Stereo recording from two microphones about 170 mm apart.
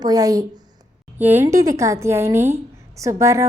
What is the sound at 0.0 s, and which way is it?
A woman's voice, 20° right (ahead or behind).